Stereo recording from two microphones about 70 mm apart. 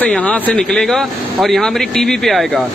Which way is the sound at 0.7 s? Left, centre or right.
Centre.